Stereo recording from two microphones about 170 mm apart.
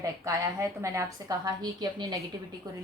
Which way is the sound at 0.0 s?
15° right (ahead or behind).